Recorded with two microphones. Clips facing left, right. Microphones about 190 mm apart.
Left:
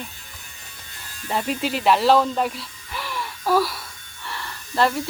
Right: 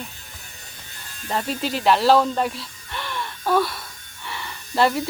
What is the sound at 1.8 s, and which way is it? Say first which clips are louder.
Speech: even; centre (ahead or behind).